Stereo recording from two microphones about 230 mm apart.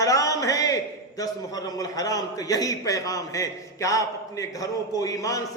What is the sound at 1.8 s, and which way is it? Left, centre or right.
A man's voice, centre.